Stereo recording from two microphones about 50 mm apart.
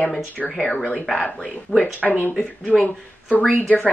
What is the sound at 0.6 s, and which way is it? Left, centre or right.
Speech, centre.